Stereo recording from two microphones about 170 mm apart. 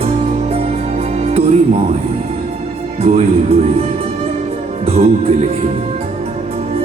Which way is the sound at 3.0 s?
40° right (ahead or behind).